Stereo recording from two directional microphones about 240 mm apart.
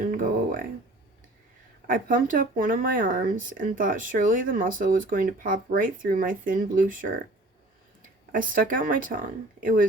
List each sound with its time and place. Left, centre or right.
0.0 s a sound: right
1.9 s speech: right
8.3 s speech: right